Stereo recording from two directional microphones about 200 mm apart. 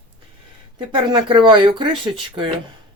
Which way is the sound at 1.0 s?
25° right (ahead or behind).